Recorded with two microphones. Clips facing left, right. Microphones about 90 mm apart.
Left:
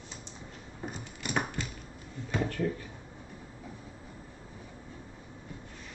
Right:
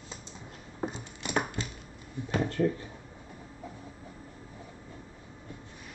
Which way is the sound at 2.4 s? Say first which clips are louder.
Right 4 dB; 25° right (ahead or behind).